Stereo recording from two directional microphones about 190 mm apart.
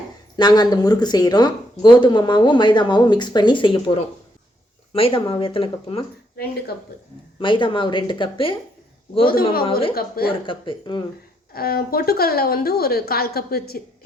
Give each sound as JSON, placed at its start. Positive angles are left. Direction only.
{"t": 0.3, "sound": "speech", "side_deg": 20}
{"t": 7.3, "sound": "speech", "side_deg": 25}
{"t": 9.3, "sound": "a woman's voice", "side_deg": 50}
{"t": 10.4, "sound": "speech", "side_deg": 25}
{"t": 11.5, "sound": "a woman's voice", "side_deg": 50}